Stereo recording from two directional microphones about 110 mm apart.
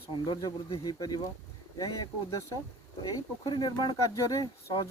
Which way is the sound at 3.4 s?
40° left (ahead or behind).